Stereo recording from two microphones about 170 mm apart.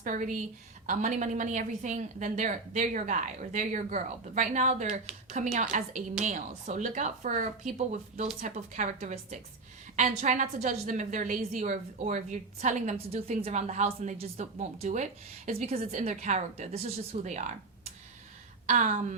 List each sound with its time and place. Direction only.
0.0 s a woman's voice: 50° right (ahead or behind)
18.6 s a woman's voice: 45° right (ahead or behind)